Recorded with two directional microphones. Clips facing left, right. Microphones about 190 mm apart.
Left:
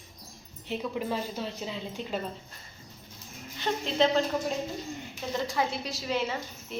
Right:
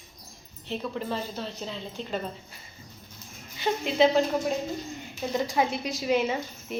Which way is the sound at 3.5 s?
10° right (ahead or behind).